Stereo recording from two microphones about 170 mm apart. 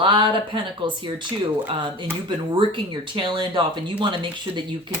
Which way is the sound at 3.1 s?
30° right (ahead or behind).